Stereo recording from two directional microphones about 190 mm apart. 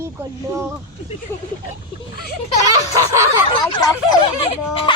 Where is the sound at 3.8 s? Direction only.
25° left (ahead or behind).